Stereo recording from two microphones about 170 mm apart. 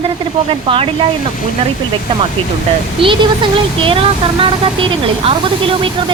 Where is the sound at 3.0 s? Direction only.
30° right (ahead or behind).